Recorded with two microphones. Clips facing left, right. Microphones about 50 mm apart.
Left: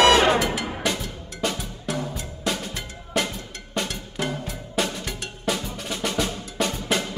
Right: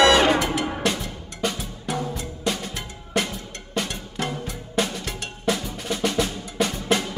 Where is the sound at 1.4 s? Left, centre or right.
Centre.